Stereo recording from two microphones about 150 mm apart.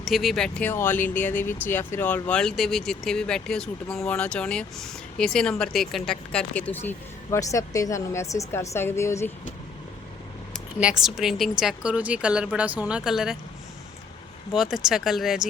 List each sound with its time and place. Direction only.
0.0 s speech: centre (ahead or behind); by 9.3 s 20° left (ahead or behind)
10.8 s speech: 5° right (ahead or behind)
14.5 s speech: centre (ahead or behind)